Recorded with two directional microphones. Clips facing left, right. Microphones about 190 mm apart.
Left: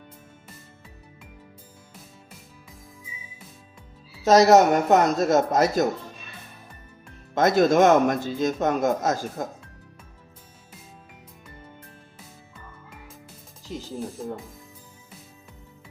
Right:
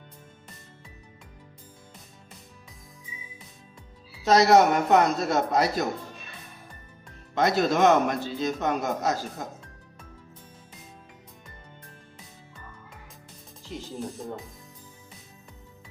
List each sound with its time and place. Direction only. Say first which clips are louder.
4.2 s speech: left 3 dB; 45° left (ahead or behind)
7.3 s speech: left 5 dB; 45° left (ahead or behind)
13.9 s speech: left 2 dB; centre (ahead or behind)